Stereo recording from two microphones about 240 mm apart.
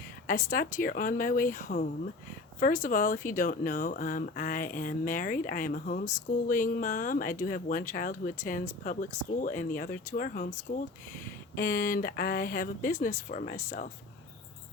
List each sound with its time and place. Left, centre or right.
0.3 s speech: left